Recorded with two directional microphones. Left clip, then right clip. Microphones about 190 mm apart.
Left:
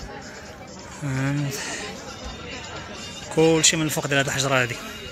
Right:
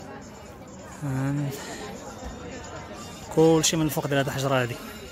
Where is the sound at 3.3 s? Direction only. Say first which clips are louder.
Left 2 dB; 15° right (ahead or behind).